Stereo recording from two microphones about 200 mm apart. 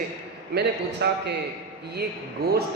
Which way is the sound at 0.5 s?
60° right (ahead or behind).